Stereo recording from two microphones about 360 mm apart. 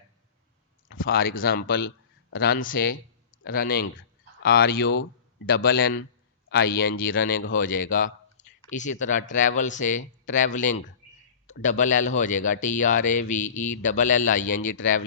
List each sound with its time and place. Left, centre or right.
0.9 s a man's voice: left